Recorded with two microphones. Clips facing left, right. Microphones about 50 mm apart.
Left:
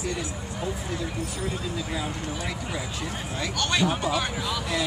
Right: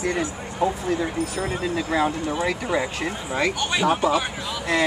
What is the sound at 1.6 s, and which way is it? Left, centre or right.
Speech, right.